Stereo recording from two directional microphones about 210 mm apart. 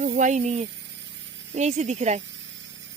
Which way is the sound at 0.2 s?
35° right (ahead or behind).